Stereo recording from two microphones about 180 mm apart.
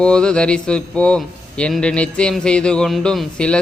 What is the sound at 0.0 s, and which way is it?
Speech, 5° left (ahead or behind).